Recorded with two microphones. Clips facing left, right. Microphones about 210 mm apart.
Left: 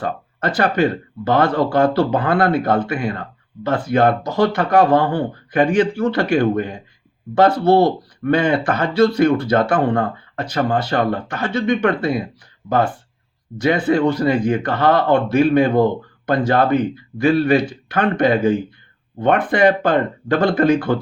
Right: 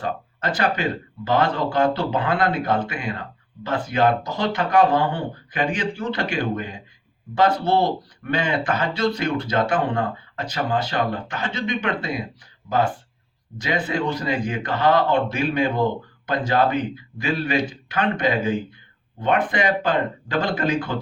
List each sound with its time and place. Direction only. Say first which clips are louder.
0.0 s speech: left 4 dB; 55° left (ahead or behind)